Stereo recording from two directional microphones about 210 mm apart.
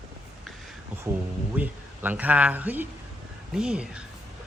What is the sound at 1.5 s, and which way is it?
Speech, 10° right (ahead or behind).